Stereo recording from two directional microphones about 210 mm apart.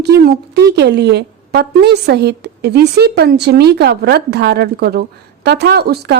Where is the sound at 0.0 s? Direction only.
50° right (ahead or behind).